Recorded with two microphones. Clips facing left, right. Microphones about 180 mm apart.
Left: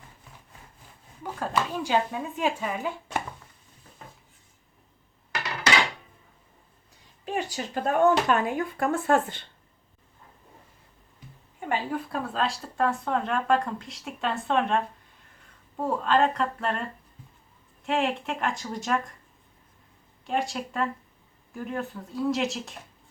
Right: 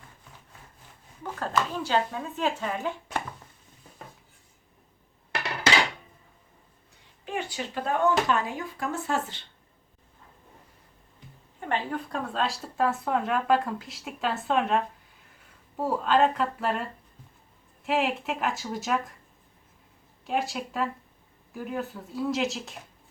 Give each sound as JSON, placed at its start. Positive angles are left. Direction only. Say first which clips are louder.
{"t": 1.2, "sound": "speech", "louder": "even", "side_deg": 10}
{"t": 7.3, "sound": "speech", "louder": "left 2 dB", "side_deg": 40}
{"t": 11.6, "sound": "speech", "louder": "left 1 dB", "side_deg": 5}
{"t": 20.2, "sound": "speech", "louder": "even", "side_deg": 0}